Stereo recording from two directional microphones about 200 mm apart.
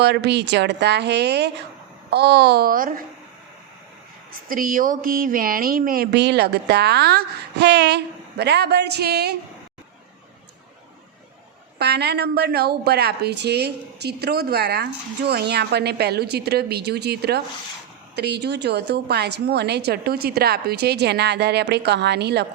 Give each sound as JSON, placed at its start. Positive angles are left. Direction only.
{"t": 0.0, "sound": "a woman's voice", "side_deg": -55}
{"t": 4.4, "sound": "speech", "side_deg": -45}
{"t": 11.8, "sound": "a woman's voice", "side_deg": -55}